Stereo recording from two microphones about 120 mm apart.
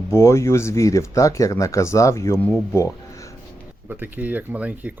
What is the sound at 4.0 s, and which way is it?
Speech, 15° right (ahead or behind).